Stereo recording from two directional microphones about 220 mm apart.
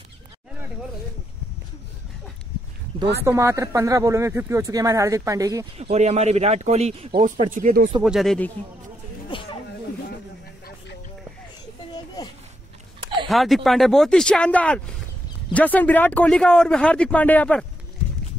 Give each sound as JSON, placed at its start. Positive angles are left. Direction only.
{"t": 3.3, "sound": "speech", "side_deg": -15}
{"t": 5.8, "sound": "speech", "side_deg": -30}
{"t": 7.2, "sound": "speech", "side_deg": -40}
{"t": 8.0, "sound": "a man's voice", "side_deg": 0}
{"t": 9.3, "sound": "snake", "side_deg": 25}
{"t": 13.3, "sound": "a man's voice", "side_deg": 0}